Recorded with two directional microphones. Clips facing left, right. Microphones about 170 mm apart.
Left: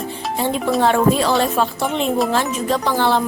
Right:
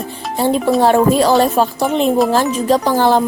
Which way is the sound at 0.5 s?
Centre (ahead or behind).